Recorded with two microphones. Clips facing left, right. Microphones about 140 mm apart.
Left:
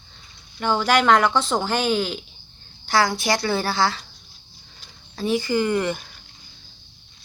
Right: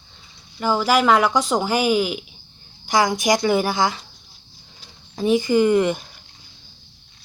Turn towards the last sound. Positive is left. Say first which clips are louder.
# right 5 dB
turn(degrees=-20)  # may be behind; listen again after turning